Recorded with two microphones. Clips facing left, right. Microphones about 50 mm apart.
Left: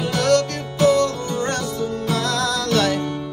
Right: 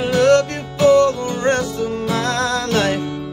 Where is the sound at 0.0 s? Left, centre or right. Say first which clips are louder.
Right 5 dB; right.